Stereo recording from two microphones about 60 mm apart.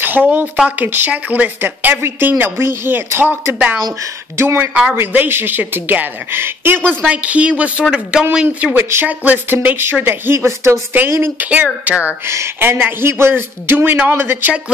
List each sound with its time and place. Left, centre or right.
0.2 s speech: centre
0.7 s speech: right
7.1 s speech: right
8.7 s speech: right
10.0 s speech: right
11.3 s speech: right
12.6 s speech: right